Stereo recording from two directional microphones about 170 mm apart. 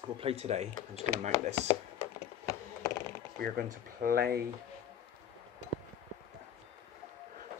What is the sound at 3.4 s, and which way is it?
Speech, 60° right (ahead or behind).